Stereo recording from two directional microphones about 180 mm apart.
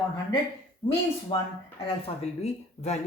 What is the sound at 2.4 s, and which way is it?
Speech, 40° left (ahead or behind).